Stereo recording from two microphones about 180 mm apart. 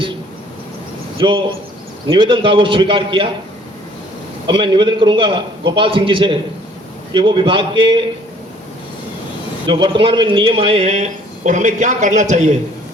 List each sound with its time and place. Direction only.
1.2 s a man's voice: 30° right (ahead or behind)
4.4 s a man's voice: 25° right (ahead or behind)
9.6 s a man's voice: 25° right (ahead or behind); by 12.5 s 40° right (ahead or behind)